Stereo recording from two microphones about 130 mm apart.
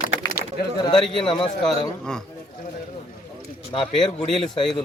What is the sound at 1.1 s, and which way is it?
Speech, 40° left (ahead or behind).